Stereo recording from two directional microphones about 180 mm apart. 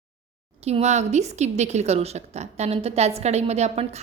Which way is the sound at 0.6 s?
35° right (ahead or behind).